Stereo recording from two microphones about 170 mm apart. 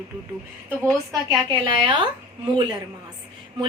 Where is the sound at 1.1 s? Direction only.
25° right (ahead or behind).